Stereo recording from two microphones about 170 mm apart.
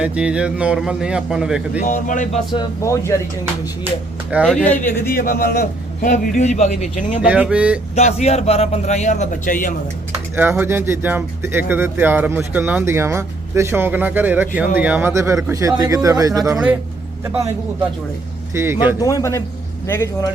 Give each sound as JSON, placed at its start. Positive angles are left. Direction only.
{"t": 0.0, "sound": "a man's voice", "side_deg": -5}
{"t": 1.8, "sound": "a man's voice", "side_deg": 50}
{"t": 2.5, "sound": "speech", "side_deg": 20}
{"t": 4.4, "sound": "speech", "side_deg": 5}
{"t": 5.1, "sound": "a man's voice", "side_deg": 55}
{"t": 7.2, "sound": "speech", "side_deg": -5}
{"t": 7.9, "sound": "a man's voice", "side_deg": 40}
{"t": 10.3, "sound": "speech", "side_deg": -10}
{"t": 18.5, "sound": "speech", "side_deg": -15}
{"t": 18.9, "sound": "a man's voice", "side_deg": 20}